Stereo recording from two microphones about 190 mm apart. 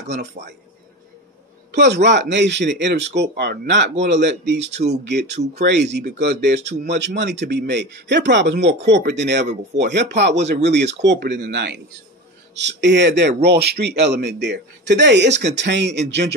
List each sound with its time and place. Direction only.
0.1 s a man's voice: 60° right (ahead or behind)
1.7 s a man's voice: 60° right (ahead or behind)